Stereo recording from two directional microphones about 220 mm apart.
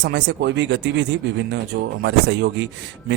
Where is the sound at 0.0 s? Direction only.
55° right (ahead or behind).